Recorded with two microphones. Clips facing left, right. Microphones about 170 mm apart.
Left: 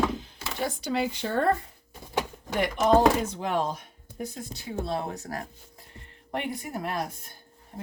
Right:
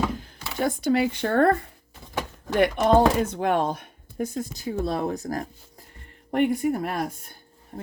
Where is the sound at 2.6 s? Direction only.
60° right (ahead or behind).